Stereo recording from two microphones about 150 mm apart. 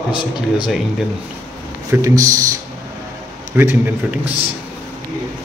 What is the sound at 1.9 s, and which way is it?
Speech, 20° right (ahead or behind).